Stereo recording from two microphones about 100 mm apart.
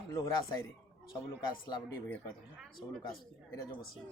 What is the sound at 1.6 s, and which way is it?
Speech, 45° left (ahead or behind).